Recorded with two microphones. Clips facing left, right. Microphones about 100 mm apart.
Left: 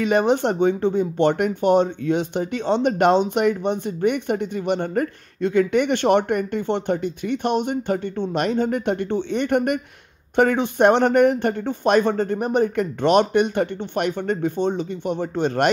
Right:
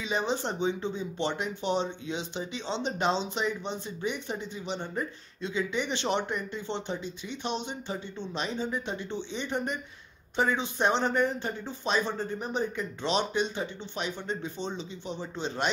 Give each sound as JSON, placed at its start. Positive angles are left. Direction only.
{"t": 0.0, "sound": "speech", "side_deg": 60}